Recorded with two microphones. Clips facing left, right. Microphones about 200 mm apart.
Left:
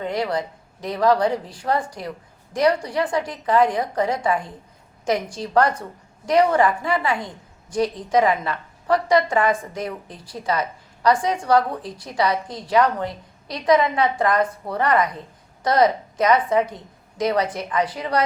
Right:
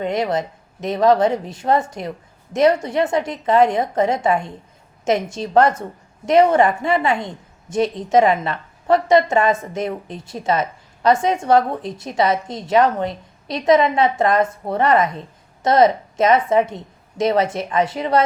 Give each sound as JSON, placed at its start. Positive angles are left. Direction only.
{"t": 0.0, "sound": "a woman's voice", "side_deg": -20}